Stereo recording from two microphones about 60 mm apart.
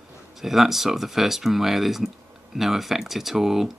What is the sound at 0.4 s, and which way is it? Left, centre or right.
Speech, centre.